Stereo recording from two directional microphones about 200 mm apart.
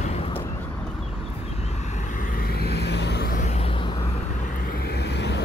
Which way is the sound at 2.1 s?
45° left (ahead or behind).